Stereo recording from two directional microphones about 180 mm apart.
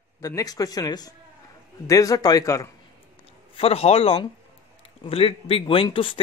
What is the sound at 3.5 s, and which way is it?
Speech, 35° left (ahead or behind).